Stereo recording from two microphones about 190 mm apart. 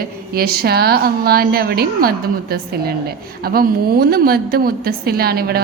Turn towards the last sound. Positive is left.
turn(degrees=-55)  # may be behind; listen again after turning